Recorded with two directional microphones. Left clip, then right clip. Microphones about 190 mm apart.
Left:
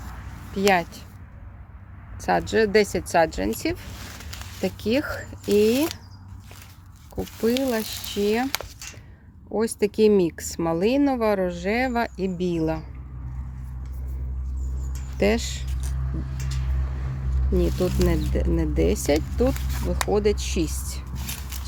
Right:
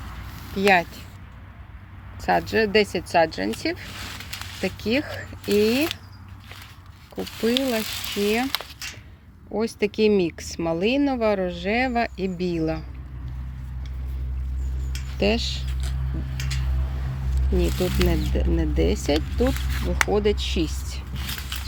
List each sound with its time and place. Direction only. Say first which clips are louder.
0.7 s speech: right 3 dB; 5° left (ahead or behind)
2.2 s speech: even; 10° left (ahead or behind)
7.2 s speech: even; 5° left (ahead or behind)
9.5 s speech: left 1 dB; 15° left (ahead or behind)
15.2 s speech: even; 15° left (ahead or behind)
17.6 s speech: even; 10° left (ahead or behind)